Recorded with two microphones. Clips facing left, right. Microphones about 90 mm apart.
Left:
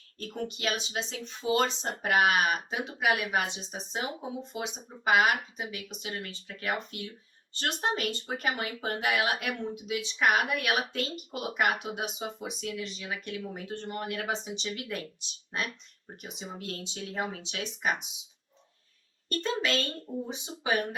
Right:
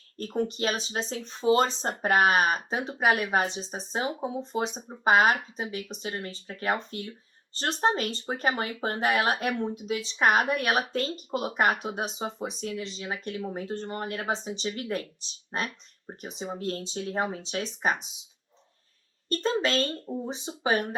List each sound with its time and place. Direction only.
0.2 s speech: 35° right (ahead or behind)
19.3 s speech: 35° right (ahead or behind)